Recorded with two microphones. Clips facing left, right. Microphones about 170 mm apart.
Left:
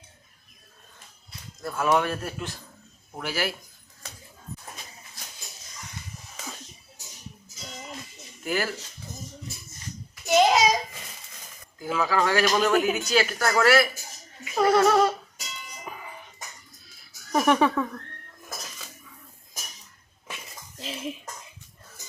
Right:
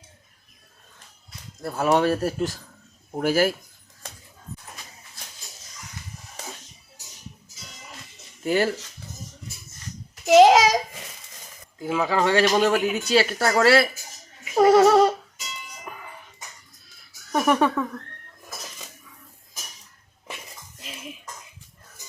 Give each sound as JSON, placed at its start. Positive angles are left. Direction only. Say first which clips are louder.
{"t": 1.6, "sound": "speech", "louder": "right 3 dB", "side_deg": -35}
{"t": 8.4, "sound": "speech", "louder": "right 6 dB", "side_deg": -30}
{"t": 10.2, "sound": "a sound", "louder": "right 6 dB", "side_deg": -90}
{"t": 11.8, "sound": "speech", "louder": "right 2 dB", "side_deg": -25}
{"t": 15.8, "sound": "dog", "louder": "left 2 dB", "side_deg": 0}
{"t": 17.0, "sound": "music", "louder": "even", "side_deg": 0}